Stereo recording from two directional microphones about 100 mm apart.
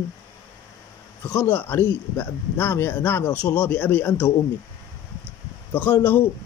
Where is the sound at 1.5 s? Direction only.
20° left (ahead or behind).